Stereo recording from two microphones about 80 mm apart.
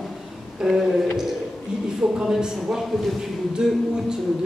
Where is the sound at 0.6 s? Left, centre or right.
Centre.